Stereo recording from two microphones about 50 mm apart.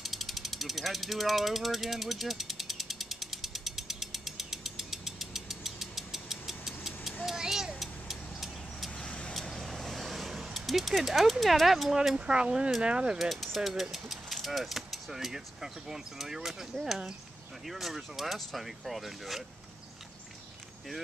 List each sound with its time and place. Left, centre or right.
0.0 s a sound: centre
8.9 s vehicle: left
9.3 s vehicle: centre
12.3 s speech: centre
13.2 s mechanisms: centre
13.7 s speech: centre